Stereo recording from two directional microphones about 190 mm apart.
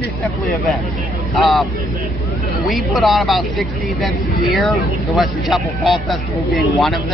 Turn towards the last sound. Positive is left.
turn(degrees=0)  # may be behind; listen again after turning